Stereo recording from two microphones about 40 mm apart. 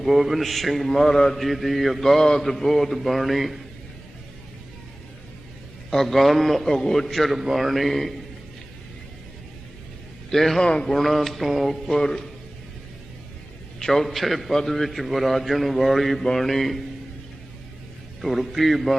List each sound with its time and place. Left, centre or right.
0.0 s a man's voice: centre
5.9 s a man's voice: centre
10.3 s a man's voice: centre
10.6 s speech: left
10.9 s a man's voice: centre
11.9 s a man's voice: centre
13.7 s a man's voice: centre
18.2 s a man's voice: centre